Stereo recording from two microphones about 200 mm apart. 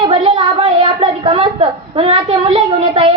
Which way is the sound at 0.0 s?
30° right (ahead or behind).